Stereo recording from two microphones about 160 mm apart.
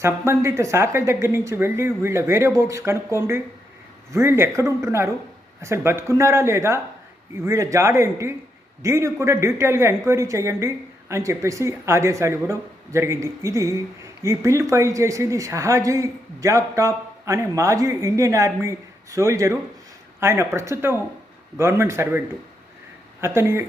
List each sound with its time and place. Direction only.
0.0 s a woman's voice: 15° right (ahead or behind)
23.2 s speech: 15° right (ahead or behind)